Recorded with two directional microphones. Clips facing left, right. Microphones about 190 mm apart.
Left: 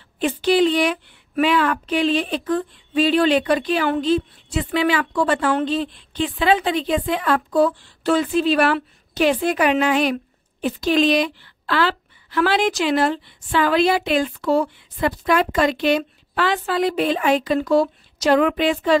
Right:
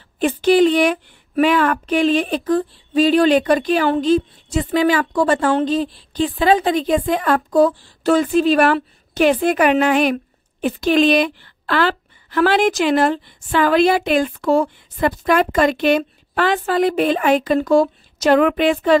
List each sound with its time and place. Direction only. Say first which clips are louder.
0.2 s a woman's voice: right 4 dB; 50° right (ahead or behind)